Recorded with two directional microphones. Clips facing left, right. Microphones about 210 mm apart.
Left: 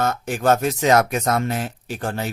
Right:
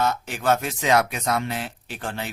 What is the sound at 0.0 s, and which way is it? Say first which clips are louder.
Speech: left 3 dB; 50° left (ahead or behind).